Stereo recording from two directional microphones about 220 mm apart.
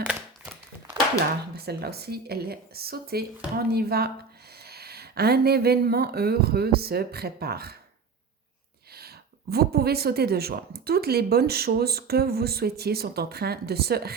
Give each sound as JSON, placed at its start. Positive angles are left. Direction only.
{"t": 0.1, "sound": "a sound", "side_deg": -5}
{"t": 1.5, "sound": "speech", "side_deg": -45}
{"t": 8.9, "sound": "speech", "side_deg": -45}